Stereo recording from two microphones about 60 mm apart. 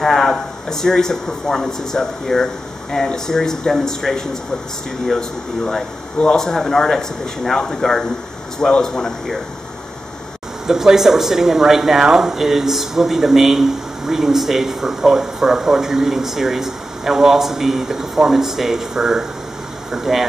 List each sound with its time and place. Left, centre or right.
0.0 s speech: centre
10.7 s speech: centre